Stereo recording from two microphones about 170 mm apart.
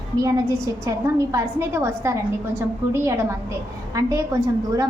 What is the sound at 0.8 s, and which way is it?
A woman's voice, 15° right (ahead or behind).